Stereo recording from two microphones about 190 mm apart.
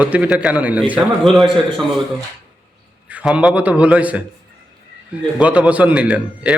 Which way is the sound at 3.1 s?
5° right (ahead or behind).